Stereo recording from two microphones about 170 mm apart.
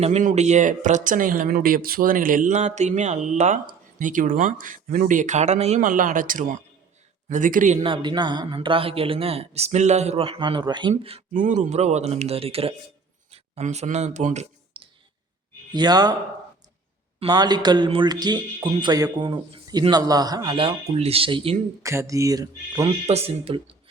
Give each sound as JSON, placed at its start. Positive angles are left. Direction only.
{"t": 0.0, "sound": "speech", "side_deg": -40}
{"t": 7.8, "sound": "speech", "side_deg": -30}
{"t": 11.3, "sound": "speech", "side_deg": -50}
{"t": 15.7, "sound": "speech", "side_deg": -25}
{"t": 17.2, "sound": "speech", "side_deg": -25}
{"t": 21.8, "sound": "speech", "side_deg": -20}
{"t": 22.8, "sound": "speech", "side_deg": -35}